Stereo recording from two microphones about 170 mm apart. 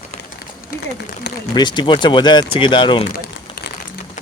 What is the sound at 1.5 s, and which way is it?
Speech, 25° left (ahead or behind).